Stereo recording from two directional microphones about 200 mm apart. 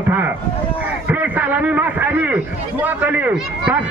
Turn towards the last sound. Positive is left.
turn(degrees=-5)  # may be behind; listen again after turning